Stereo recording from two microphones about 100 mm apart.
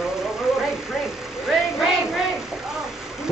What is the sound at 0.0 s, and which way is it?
Vehicle, 5° right (ahead or behind).